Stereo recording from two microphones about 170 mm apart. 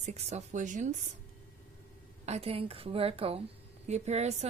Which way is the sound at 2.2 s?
40° right (ahead or behind).